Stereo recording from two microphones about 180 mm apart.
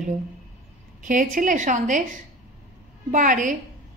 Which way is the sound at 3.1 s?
45° right (ahead or behind).